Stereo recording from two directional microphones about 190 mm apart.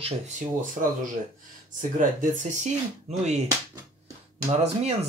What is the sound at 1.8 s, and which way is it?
Speech, 40° right (ahead or behind).